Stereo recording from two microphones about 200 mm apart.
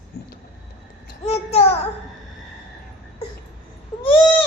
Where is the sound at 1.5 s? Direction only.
30° left (ahead or behind).